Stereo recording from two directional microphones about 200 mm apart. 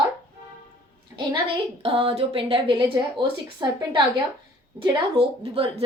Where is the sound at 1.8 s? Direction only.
25° right (ahead or behind).